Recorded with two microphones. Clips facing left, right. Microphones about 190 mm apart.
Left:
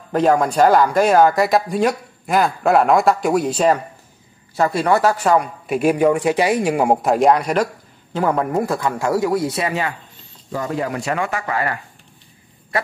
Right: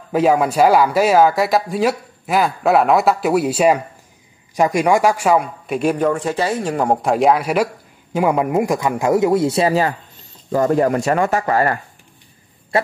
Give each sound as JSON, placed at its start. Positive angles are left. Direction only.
{"t": 0.1, "sound": "speech", "side_deg": -5}
{"t": 5.7, "sound": "speech", "side_deg": 5}
{"t": 10.5, "sound": "speech", "side_deg": -45}
{"t": 12.7, "sound": "speech", "side_deg": -25}